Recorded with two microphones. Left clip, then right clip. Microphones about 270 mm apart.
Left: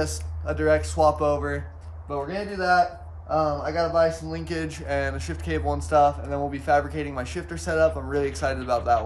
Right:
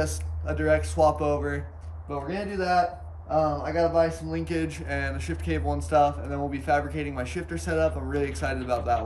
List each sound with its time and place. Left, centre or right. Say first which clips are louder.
0.0 s a man's voice: left 1 dB; centre